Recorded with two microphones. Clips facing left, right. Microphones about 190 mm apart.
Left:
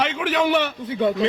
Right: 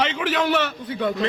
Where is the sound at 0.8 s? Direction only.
25° left (ahead or behind).